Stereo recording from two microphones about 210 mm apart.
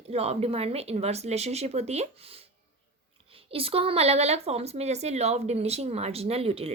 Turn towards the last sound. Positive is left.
turn(degrees=-30)  # may be behind; listen again after turning